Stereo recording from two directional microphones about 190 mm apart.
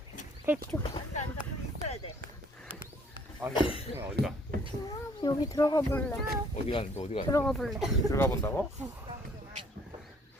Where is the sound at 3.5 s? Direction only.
30° left (ahead or behind).